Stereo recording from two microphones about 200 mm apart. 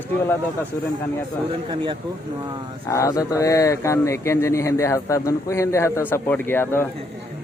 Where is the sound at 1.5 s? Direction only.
25° right (ahead or behind).